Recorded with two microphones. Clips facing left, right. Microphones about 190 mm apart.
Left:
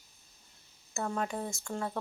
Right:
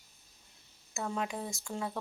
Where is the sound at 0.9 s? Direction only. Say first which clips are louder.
Left 2 dB; 5° right (ahead or behind).